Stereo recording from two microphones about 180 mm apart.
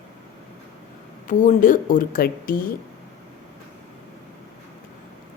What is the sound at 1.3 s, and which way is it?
A woman's voice, 45° left (ahead or behind).